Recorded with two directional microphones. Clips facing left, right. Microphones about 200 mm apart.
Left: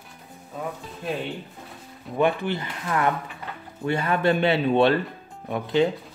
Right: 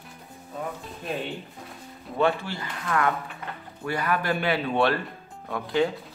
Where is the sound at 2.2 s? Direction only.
20° left (ahead or behind).